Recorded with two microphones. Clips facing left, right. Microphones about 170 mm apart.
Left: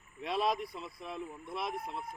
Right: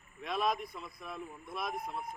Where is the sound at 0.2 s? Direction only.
30° left (ahead or behind).